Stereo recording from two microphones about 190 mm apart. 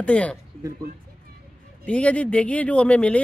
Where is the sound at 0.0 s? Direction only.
5° left (ahead or behind).